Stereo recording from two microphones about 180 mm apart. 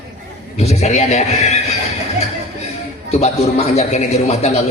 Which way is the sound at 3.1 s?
35° left (ahead or behind).